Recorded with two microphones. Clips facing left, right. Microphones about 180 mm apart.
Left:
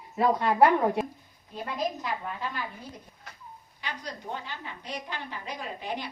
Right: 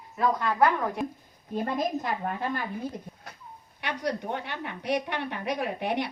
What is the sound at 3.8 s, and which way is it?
A woman's voice, 65° right (ahead or behind).